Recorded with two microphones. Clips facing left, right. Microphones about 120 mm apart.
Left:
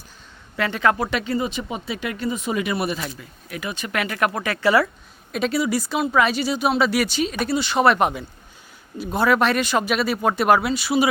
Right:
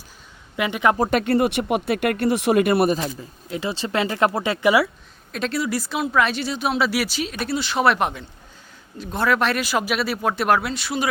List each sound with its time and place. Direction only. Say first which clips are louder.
0.5 s speech: right 1 dB; 15° right (ahead or behind)
1.1 s speech: right 5 dB; 60° right (ahead or behind); by 4.9 s 15° right (ahead or behind)
5.3 s speech: left 3 dB; 5° left (ahead or behind)